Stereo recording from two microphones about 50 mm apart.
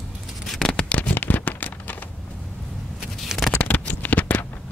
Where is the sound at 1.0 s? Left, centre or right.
Left.